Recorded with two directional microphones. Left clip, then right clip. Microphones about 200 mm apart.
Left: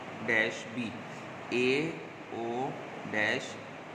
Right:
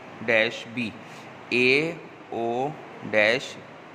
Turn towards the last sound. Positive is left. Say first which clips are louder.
# right 9 dB
turn(degrees=-45)  # may be behind; listen again after turning